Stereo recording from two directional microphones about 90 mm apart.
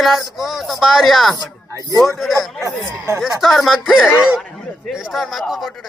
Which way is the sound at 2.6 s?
35° right (ahead or behind).